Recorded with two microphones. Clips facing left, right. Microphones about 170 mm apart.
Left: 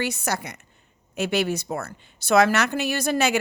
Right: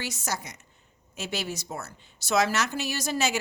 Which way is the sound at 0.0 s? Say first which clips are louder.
Left 7 dB; 60° left (ahead or behind).